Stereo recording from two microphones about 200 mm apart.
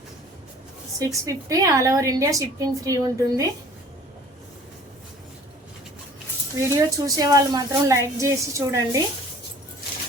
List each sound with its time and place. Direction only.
0.9 s a woman's voice: 15° right (ahead or behind)
6.6 s a woman's voice: 15° right (ahead or behind)